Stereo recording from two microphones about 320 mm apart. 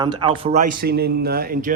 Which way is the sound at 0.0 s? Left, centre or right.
Centre.